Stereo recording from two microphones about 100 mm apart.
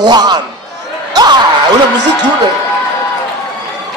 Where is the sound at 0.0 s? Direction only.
45° right (ahead or behind).